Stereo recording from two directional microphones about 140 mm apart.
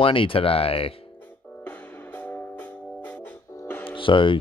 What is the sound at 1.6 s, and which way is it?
Music, 15° left (ahead or behind).